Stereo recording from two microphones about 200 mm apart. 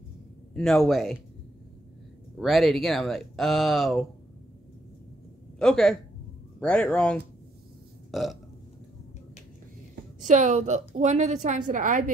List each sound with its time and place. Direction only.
0.6 s speech: centre (ahead or behind)
2.3 s speech: centre (ahead or behind)
5.6 s speech: 5° left (ahead or behind)
8.1 s burping: centre (ahead or behind)
10.2 s a woman's voice: 40° right (ahead or behind)